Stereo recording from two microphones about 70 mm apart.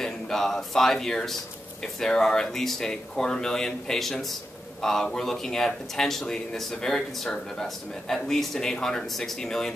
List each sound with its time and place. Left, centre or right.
0.0 s speech: centre